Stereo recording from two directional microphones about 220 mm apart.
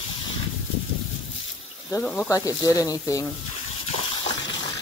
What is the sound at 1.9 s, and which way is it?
Speech, 10° left (ahead or behind).